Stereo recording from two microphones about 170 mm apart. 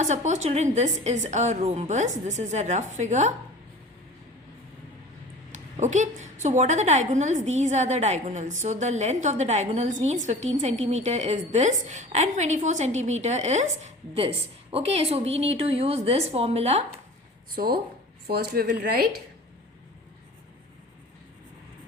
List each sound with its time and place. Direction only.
0.0 s a woman's voice: 45° right (ahead or behind)
5.5 s a woman's voice: 45° right (ahead or behind)
17.5 s a woman's voice: 60° right (ahead or behind)